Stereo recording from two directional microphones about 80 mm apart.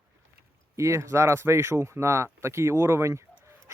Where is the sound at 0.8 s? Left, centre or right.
Right.